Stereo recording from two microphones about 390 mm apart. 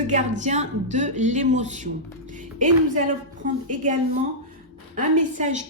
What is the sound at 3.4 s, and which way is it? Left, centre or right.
Speech, centre.